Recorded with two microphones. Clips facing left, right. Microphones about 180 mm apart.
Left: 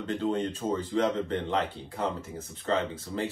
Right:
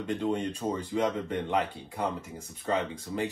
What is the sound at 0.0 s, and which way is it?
Speech, 15° right (ahead or behind).